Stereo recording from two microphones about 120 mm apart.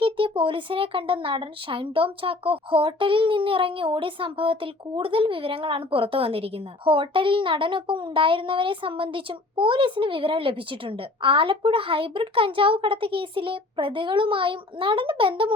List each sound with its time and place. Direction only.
0.0 s speech: 45° right (ahead or behind)